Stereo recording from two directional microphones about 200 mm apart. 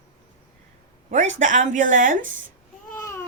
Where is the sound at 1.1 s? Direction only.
35° right (ahead or behind).